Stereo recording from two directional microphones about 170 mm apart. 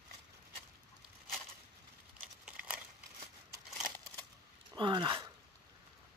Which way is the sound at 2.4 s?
10° right (ahead or behind).